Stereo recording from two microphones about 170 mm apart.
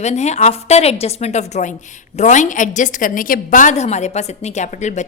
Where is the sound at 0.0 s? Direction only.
40° left (ahead or behind).